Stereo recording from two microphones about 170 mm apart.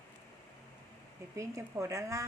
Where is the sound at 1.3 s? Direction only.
15° right (ahead or behind).